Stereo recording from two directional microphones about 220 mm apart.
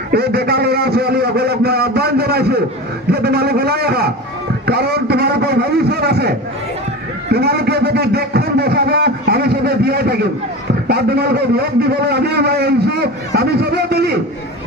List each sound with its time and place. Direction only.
0.1 s a man's voice: 45° right (ahead or behind)